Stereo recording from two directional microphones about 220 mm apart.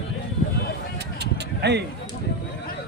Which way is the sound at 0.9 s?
50° right (ahead or behind).